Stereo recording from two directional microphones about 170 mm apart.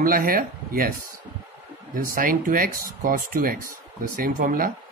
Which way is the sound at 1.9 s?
55° right (ahead or behind).